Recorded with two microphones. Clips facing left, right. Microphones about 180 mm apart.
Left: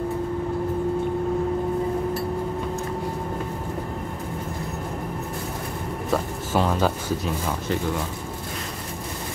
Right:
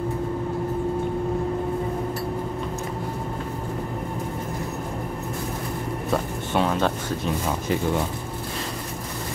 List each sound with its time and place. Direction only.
6.5 s speech: 5° left (ahead or behind)